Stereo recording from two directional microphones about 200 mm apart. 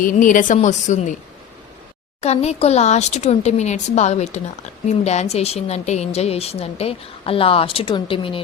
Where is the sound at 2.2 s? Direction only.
30° left (ahead or behind).